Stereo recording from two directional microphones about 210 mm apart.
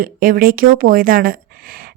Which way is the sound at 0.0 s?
45° right (ahead or behind).